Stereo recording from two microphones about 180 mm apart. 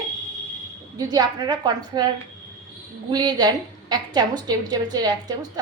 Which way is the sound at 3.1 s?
20° right (ahead or behind).